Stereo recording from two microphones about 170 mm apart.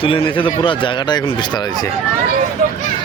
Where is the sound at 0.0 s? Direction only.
30° left (ahead or behind).